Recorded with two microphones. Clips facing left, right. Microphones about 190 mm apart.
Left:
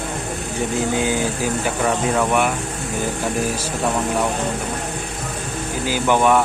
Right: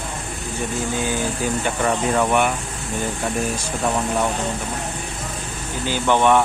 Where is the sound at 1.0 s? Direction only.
15° left (ahead or behind).